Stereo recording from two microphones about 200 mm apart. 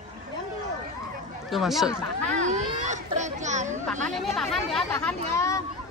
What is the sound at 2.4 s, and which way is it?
A child's voice, 35° right (ahead or behind).